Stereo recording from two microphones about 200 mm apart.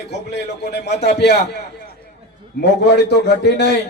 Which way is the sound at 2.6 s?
55° left (ahead or behind).